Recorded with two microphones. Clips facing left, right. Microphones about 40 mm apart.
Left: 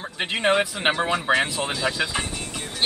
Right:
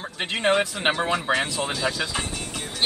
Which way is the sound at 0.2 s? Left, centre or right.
Centre.